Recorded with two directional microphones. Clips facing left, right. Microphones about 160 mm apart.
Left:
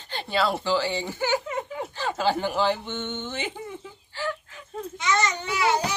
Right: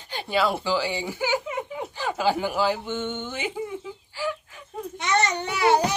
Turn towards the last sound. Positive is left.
turn(degrees=-70)  # may be behind; listen again after turning